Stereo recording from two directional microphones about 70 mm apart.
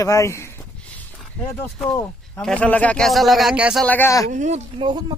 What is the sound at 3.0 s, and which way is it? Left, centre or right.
Speech, centre.